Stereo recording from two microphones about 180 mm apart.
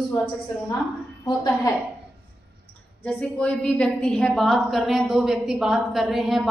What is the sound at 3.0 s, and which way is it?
A woman's voice, 10° left (ahead or behind).